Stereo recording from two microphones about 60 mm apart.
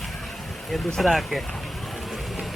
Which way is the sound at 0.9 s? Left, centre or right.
Centre.